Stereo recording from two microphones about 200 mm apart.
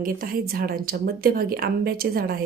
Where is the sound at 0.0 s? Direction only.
45° right (ahead or behind).